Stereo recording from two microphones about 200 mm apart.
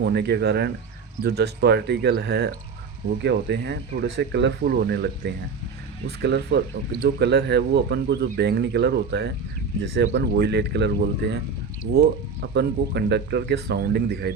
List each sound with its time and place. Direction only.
0.0 s speech: 55° right (ahead or behind)